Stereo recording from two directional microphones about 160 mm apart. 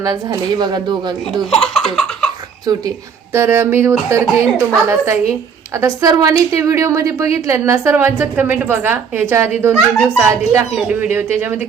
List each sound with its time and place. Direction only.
0.0 s speech: 25° right (ahead or behind)
1.5 s a sound: 5° left (ahead or behind)
2.7 s a woman's voice: 25° right (ahead or behind)